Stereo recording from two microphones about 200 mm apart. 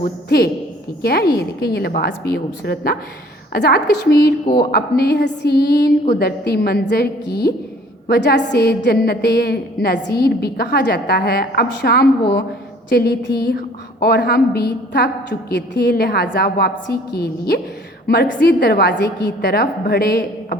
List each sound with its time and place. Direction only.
0.0 s a woman's voice: 50° left (ahead or behind)